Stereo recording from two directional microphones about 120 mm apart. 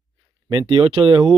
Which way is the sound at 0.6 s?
45° right (ahead or behind).